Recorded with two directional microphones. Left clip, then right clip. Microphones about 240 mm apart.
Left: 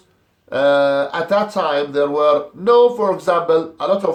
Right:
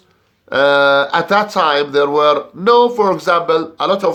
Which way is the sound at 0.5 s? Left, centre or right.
Right.